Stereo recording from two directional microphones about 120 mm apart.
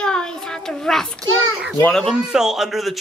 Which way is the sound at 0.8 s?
5° left (ahead or behind).